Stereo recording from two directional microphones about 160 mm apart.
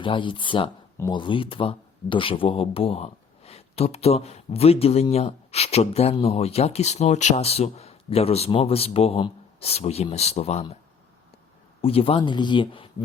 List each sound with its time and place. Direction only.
0.0 s speech: 30° left (ahead or behind)
11.8 s speech: 35° left (ahead or behind)